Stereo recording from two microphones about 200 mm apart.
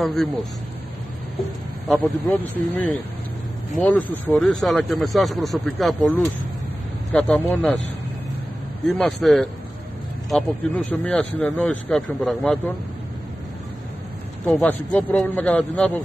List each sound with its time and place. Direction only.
0.0 s speech: centre (ahead or behind)
1.9 s speech: centre (ahead or behind)
8.9 s a man's voice: 5° left (ahead or behind)
14.4 s speech: 5° left (ahead or behind)